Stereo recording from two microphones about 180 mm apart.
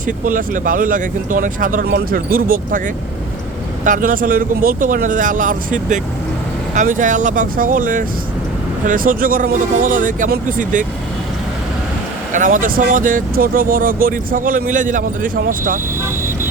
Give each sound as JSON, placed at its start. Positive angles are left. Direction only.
{"t": 0.3, "sound": "speech", "side_deg": -50}
{"t": 3.8, "sound": "speech", "side_deg": -50}
{"t": 12.3, "sound": "speech", "side_deg": -45}